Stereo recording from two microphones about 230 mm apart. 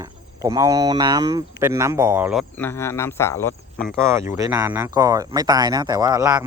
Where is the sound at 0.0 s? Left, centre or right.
Centre.